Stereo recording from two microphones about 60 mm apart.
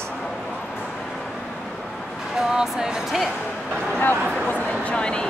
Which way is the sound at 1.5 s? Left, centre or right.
Centre.